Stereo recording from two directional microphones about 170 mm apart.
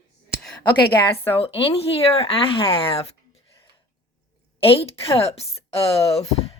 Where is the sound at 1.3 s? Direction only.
35° left (ahead or behind).